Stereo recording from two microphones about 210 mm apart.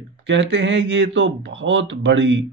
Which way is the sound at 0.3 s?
60° right (ahead or behind).